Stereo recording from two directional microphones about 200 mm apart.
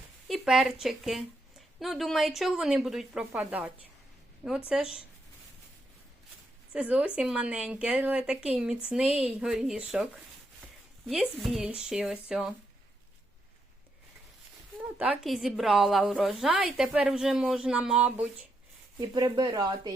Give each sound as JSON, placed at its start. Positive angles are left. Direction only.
{"t": 0.3, "sound": "a woman's voice", "side_deg": 0}
{"t": 4.7, "sound": "a woman's voice", "side_deg": -5}
{"t": 6.7, "sound": "a woman's voice", "side_deg": -5}
{"t": 14.9, "sound": "a woman's voice", "side_deg": -5}
{"t": 18.9, "sound": "speech", "side_deg": -20}